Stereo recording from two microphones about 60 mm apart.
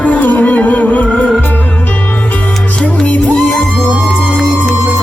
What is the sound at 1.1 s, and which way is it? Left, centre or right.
Music, centre.